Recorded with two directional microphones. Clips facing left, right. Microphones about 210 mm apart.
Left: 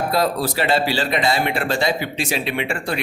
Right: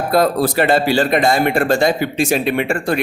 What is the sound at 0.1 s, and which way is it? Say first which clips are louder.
A man's voice: right 10 dB; 55° right (ahead or behind).